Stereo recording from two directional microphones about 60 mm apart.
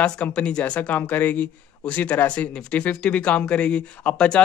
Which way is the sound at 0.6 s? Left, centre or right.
Left.